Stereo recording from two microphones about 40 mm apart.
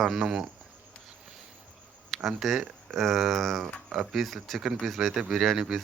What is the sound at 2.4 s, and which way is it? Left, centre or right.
Speech, centre.